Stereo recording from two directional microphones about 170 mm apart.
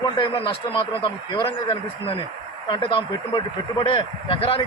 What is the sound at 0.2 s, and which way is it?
Speech, 30° left (ahead or behind).